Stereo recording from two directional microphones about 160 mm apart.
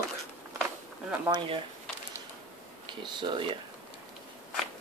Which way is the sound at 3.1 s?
30° right (ahead or behind).